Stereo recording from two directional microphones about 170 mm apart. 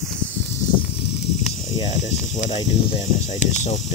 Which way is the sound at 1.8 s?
45° left (ahead or behind).